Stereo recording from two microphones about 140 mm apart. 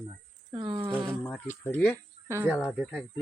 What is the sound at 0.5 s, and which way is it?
Speech, 35° right (ahead or behind).